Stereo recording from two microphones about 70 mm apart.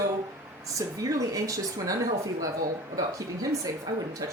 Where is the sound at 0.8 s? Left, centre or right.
Right.